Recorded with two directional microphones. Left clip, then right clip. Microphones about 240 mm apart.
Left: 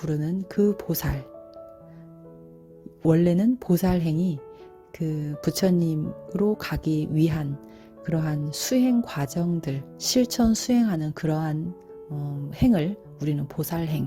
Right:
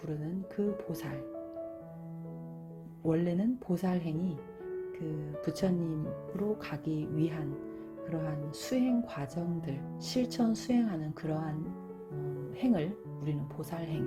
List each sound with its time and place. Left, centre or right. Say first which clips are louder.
0.0 s speech: left 10 dB; left
3.0 s speech: left 10 dB; left